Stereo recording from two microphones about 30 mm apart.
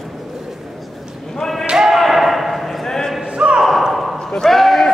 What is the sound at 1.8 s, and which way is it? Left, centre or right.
Slam, centre.